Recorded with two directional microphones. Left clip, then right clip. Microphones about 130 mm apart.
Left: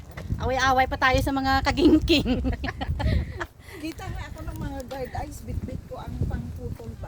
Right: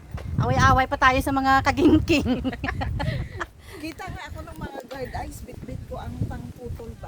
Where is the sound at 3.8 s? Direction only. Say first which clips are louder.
Even; 25° right (ahead or behind).